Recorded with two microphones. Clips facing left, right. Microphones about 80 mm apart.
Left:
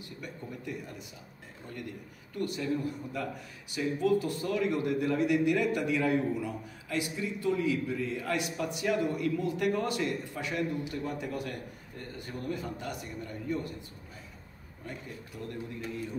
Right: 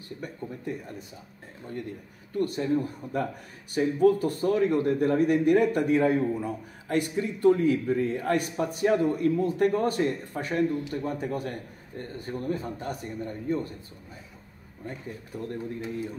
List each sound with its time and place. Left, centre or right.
0.2 s a man's voice: right
2.3 s a man's voice: right
6.9 s a man's voice: right
14.9 s a man's voice: right